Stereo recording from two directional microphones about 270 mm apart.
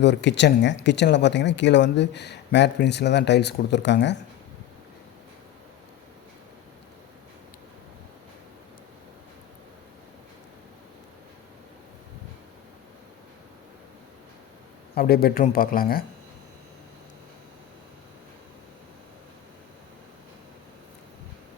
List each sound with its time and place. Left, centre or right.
0.0 s speech: left
14.9 s speech: left